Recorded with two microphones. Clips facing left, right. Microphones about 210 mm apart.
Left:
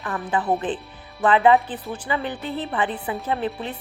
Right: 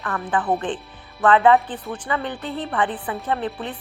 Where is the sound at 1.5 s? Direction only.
5° left (ahead or behind).